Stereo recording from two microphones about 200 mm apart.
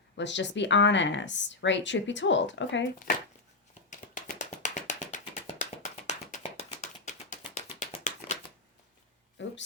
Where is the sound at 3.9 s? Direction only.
40° left (ahead or behind).